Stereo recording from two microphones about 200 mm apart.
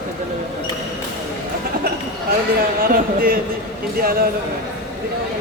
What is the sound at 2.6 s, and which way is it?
Speech, 45° right (ahead or behind).